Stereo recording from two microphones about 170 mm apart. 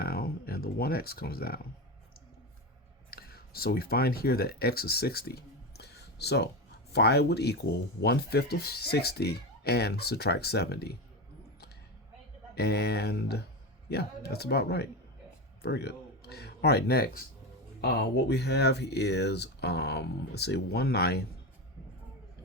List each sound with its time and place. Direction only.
0.0 s a sound: 65° left (ahead or behind)
3.1 s speech: 60° left (ahead or behind)
12.5 s speech: 70° left (ahead or behind)